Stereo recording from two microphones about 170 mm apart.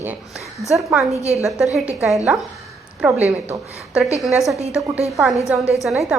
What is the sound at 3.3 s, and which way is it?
Speech, 5° right (ahead or behind).